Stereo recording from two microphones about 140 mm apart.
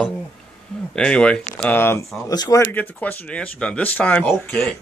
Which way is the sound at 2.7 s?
10° left (ahead or behind).